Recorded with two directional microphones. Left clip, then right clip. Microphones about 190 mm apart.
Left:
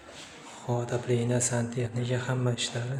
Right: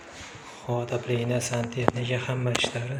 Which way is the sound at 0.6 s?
15° left (ahead or behind).